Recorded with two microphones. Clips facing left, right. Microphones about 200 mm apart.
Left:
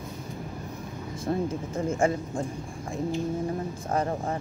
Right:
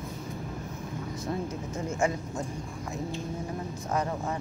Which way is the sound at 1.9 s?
30° left (ahead or behind).